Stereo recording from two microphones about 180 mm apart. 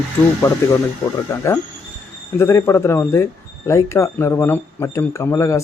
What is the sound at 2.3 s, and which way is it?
Speech, 15° left (ahead or behind).